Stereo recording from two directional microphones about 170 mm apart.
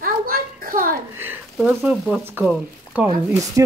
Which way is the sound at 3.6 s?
15° right (ahead or behind).